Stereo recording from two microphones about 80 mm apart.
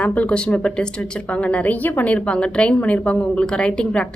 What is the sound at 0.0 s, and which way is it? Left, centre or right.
A woman's voice, centre.